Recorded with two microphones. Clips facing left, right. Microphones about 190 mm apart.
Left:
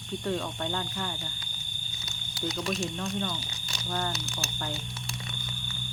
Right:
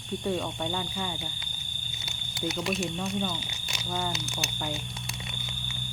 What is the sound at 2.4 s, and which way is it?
Speech, 5° right (ahead or behind).